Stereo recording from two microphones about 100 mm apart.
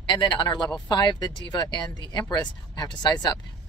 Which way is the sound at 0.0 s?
55° left (ahead or behind).